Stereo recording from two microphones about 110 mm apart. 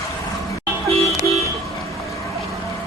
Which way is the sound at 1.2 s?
30° left (ahead or behind).